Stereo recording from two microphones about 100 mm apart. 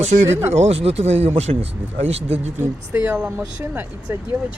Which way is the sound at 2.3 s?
20° right (ahead or behind).